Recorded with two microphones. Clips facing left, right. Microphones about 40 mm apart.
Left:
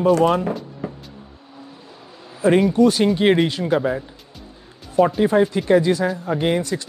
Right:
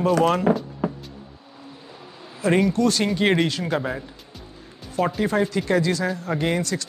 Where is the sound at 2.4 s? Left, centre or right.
Centre.